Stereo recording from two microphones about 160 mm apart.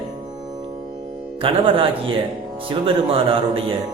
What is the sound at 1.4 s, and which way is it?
Music, 35° right (ahead or behind).